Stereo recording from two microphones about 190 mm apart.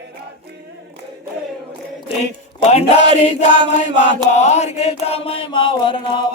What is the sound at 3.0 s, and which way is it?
Chant, 25° right (ahead or behind).